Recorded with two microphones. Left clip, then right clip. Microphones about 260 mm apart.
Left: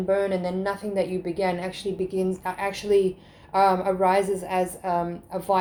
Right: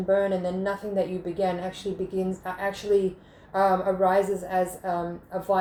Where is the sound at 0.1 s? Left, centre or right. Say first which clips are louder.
Right 1 dB; left.